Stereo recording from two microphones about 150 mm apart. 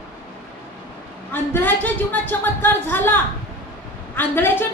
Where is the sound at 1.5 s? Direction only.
10° left (ahead or behind).